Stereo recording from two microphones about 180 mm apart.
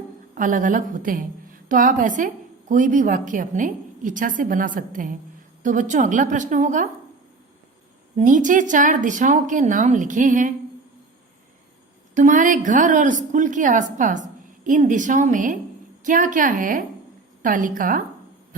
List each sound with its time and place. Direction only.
0.3 s a woman's voice: 45° right (ahead or behind)
8.1 s a woman's voice: 45° right (ahead or behind)
12.1 s a woman's voice: 45° right (ahead or behind)